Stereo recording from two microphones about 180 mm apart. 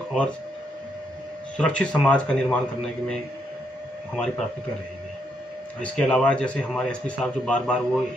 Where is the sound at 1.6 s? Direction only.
5° left (ahead or behind).